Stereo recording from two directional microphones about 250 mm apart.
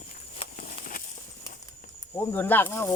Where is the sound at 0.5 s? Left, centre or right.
Left.